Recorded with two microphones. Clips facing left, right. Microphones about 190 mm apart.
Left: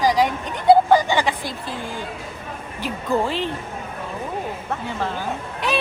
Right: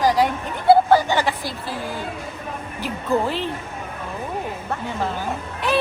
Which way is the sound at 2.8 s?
15° left (ahead or behind).